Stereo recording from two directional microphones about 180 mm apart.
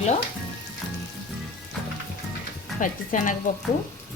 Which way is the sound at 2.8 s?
45° left (ahead or behind).